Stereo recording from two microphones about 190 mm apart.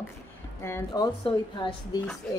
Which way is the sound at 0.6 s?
15° left (ahead or behind).